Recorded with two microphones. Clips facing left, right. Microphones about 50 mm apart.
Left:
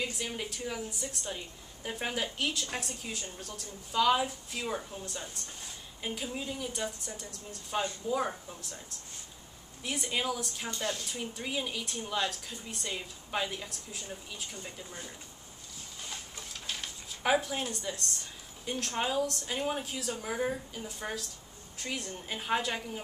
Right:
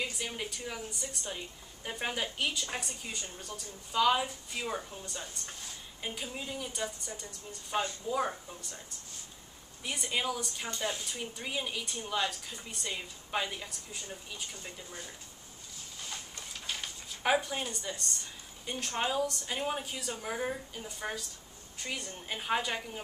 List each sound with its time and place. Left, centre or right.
0.0 s a woman's voice: centre
9.8 s a woman's voice: centre
10.7 s a woman's voice: centre
16.1 s a woman's voice: centre